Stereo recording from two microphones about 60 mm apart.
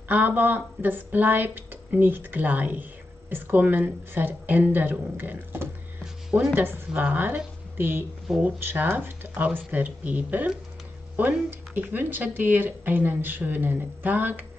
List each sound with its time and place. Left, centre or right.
0.1 s a woman's voice: right
11.7 s speech: right